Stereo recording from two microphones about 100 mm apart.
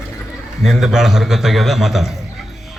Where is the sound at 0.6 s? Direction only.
5° right (ahead or behind).